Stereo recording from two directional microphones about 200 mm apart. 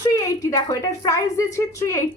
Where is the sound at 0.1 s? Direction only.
15° left (ahead or behind).